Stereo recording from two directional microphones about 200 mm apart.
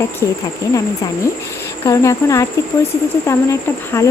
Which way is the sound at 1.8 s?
15° left (ahead or behind).